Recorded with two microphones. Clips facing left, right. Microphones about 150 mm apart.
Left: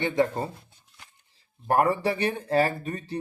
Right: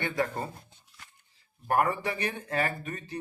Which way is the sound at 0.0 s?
20° left (ahead or behind).